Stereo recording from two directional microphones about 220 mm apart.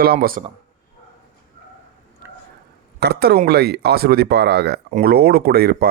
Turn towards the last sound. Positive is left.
turn(degrees=-45)  # may be behind; listen again after turning